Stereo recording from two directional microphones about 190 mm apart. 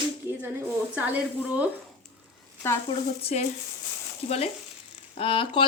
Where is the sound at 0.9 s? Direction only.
10° right (ahead or behind).